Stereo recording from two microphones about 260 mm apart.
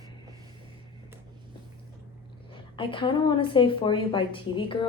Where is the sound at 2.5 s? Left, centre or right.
Centre.